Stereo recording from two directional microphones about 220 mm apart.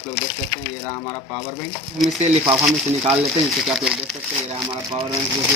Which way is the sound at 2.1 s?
30° right (ahead or behind).